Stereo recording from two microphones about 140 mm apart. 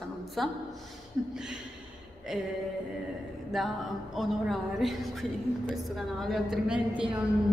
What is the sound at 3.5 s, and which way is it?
A woman's voice, centre (ahead or behind).